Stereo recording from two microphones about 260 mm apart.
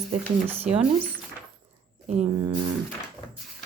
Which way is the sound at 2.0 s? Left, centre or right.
Right.